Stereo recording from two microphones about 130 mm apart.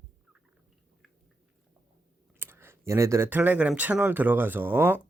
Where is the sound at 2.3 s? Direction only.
15° right (ahead or behind).